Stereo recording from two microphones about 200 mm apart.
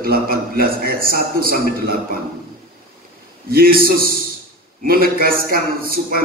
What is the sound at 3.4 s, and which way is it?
A man's voice, 45° right (ahead or behind).